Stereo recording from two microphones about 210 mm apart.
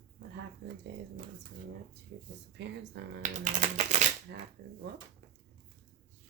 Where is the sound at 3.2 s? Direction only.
35° right (ahead or behind).